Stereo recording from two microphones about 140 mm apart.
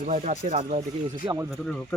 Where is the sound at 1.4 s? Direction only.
5° left (ahead or behind).